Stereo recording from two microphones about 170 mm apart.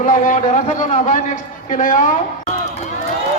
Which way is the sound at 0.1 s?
45° left (ahead or behind).